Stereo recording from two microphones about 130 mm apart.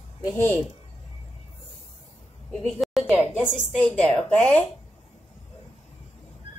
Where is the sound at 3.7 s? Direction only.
10° left (ahead or behind).